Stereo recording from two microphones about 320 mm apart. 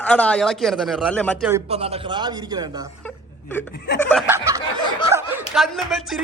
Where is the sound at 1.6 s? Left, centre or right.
Centre.